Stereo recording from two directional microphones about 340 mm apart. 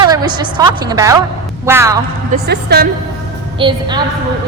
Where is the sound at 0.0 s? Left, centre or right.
Centre.